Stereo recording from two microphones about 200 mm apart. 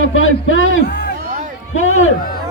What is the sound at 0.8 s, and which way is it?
Speech, 50° left (ahead or behind).